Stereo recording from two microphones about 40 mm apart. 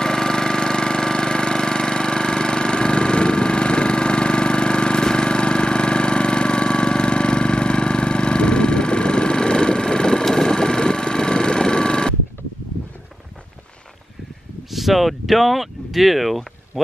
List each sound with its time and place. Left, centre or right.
0.0 s engine: centre
10.3 s vehicle: centre
14.7 s a sound: centre